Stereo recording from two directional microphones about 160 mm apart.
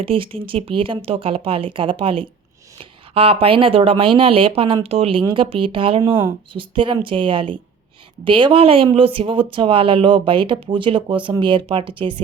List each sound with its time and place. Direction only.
0.0 s speech: 35° right (ahead or behind)